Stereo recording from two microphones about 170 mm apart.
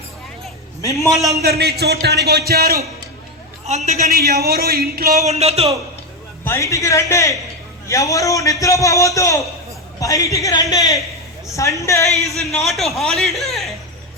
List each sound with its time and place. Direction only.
1.4 s speech: 70° right (ahead or behind)
3.7 s a man's voice: 40° right (ahead or behind)
4.0 s speech: 65° right (ahead or behind)
5.2 s a man's voice: 40° right (ahead or behind)
6.4 s a man's voice: 15° left (ahead or behind)
12.0 s a man's voice: centre (ahead or behind)